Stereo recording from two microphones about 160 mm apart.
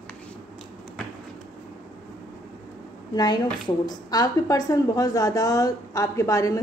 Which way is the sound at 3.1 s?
25° left (ahead or behind).